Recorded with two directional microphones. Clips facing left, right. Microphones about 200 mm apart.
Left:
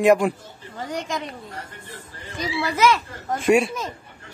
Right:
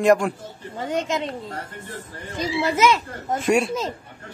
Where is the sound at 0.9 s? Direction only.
25° right (ahead or behind).